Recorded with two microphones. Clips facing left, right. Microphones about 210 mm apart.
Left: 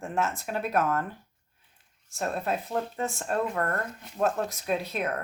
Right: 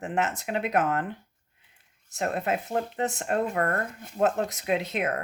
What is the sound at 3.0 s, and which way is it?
Speech, 75° right (ahead or behind).